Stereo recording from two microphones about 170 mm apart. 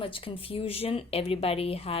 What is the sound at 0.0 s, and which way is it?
A woman's voice, 30° left (ahead or behind).